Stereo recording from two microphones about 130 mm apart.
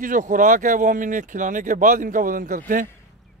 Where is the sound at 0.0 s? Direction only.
90° right.